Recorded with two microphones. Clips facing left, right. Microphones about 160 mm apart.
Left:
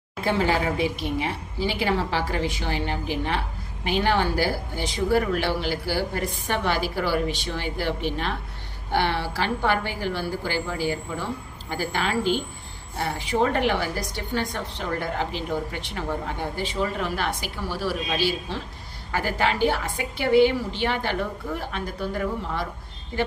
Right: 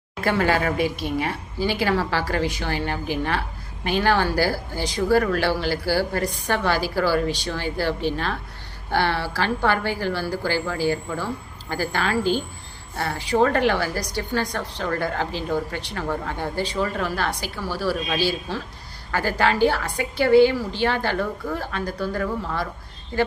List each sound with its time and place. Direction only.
0.2 s a woman's voice: 20° left (ahead or behind)